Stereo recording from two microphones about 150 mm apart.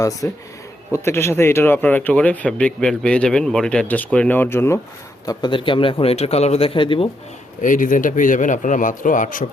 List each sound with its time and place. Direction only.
0.0 s speech: 20° left (ahead or behind)
5.2 s speech: 25° left (ahead or behind)
7.6 s speech: 60° left (ahead or behind)